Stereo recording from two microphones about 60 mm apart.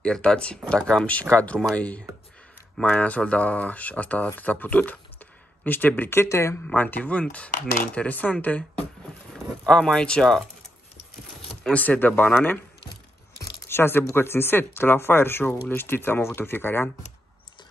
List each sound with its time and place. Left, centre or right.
0.0 s speech: centre; by 6.0 s left
6.2 s speech: left
6.6 s speech: left; by 10.4 s centre
11.7 s speech: left
13.7 s speech: left